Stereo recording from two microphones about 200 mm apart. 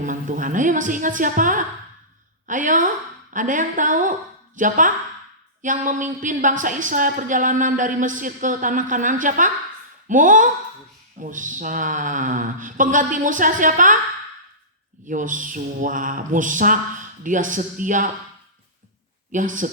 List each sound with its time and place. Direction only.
0.0 s a woman's voice: 40° right (ahead or behind)
15.0 s a woman's voice: 40° right (ahead or behind)
19.3 s a woman's voice: 40° right (ahead or behind)